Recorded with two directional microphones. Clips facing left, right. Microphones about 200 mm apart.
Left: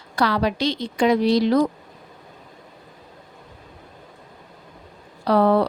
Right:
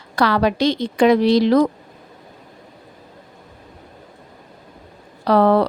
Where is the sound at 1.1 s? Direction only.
90° right.